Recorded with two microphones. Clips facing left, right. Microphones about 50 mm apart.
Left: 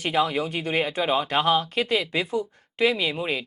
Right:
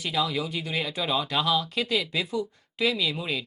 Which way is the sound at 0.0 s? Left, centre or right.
Left.